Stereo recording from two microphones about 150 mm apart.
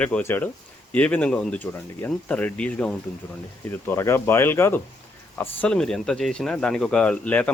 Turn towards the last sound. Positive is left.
turn(degrees=10)  # may be behind; listen again after turning